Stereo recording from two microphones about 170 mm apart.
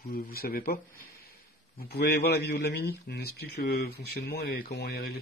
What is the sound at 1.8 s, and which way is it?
Speech, 70° left (ahead or behind).